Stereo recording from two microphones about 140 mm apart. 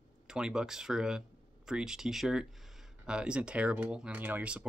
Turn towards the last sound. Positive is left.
turn(degrees=-10)  # may be behind; listen again after turning